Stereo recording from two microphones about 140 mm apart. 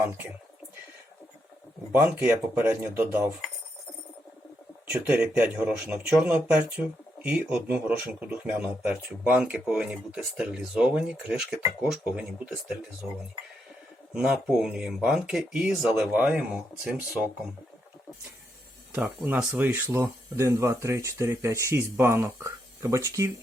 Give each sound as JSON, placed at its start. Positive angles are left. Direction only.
{"t": 1.9, "sound": "speech", "side_deg": -15}
{"t": 4.9, "sound": "speech", "side_deg": -10}
{"t": 14.1, "sound": "speech", "side_deg": -5}
{"t": 18.9, "sound": "speech", "side_deg": -10}